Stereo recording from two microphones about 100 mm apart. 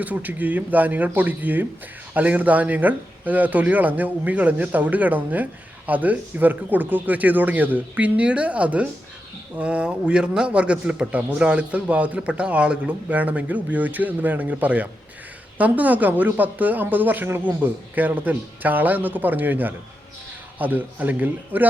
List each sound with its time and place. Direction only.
0.0 s speech: 15° right (ahead or behind)